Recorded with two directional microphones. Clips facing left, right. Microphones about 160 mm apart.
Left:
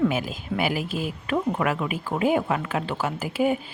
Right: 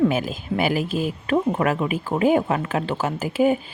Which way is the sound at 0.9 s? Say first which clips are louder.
Right 5 dB; 25° right (ahead or behind).